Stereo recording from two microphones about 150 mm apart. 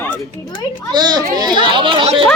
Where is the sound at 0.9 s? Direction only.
30° right (ahead or behind).